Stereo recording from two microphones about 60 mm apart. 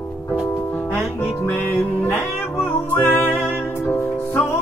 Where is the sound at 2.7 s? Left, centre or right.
Left.